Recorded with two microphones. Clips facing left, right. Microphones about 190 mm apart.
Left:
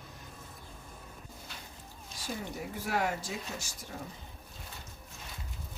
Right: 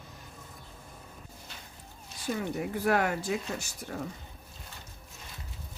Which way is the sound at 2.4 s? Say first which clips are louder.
Right 7 dB; 60° right (ahead or behind).